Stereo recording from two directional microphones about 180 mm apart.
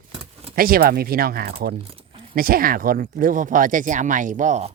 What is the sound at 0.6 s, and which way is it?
Speech, 55° right (ahead or behind).